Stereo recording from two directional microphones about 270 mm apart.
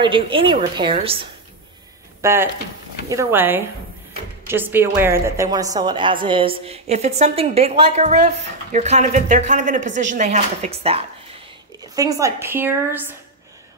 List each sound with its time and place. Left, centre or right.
0.0 s a woman's voice: centre
2.2 s a woman's voice: centre